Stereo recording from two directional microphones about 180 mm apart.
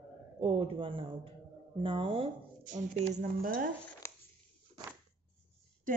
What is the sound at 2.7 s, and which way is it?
A woman's voice, 40° right (ahead or behind).